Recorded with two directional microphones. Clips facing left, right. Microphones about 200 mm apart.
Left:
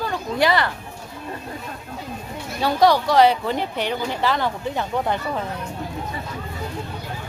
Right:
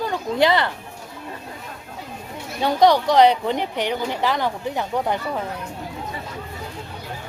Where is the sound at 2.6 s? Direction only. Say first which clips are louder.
Right 1 dB; 20° right (ahead or behind).